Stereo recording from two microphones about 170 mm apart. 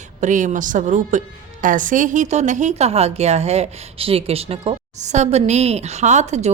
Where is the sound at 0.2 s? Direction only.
50° right (ahead or behind).